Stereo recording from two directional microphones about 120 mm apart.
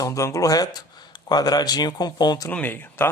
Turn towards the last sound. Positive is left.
turn(degrees=15)  # may be behind; listen again after turning